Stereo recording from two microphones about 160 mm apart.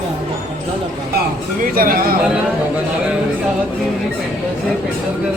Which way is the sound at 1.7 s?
65° right (ahead or behind).